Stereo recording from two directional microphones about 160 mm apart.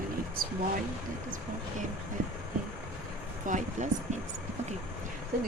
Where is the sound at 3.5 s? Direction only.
50° right (ahead or behind).